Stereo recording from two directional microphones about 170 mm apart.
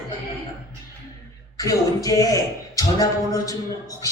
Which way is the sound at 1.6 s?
20° left (ahead or behind).